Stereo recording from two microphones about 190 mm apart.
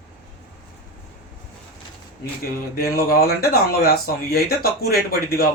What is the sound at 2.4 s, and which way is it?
Speech, 55° left (ahead or behind).